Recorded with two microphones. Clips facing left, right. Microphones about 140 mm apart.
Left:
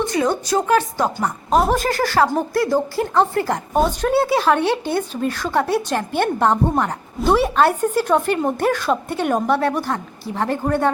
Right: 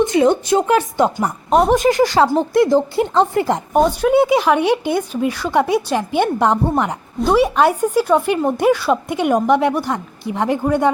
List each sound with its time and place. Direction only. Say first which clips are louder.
0.0 s a woman's voice: right 6 dB; 20° right (ahead or behind)
1.5 s speech: right 3 dB; centre (ahead or behind)
1.8 s a woman's voice: right 4 dB; 15° right (ahead or behind)
3.8 s speech: right 4 dB; 10° right (ahead or behind)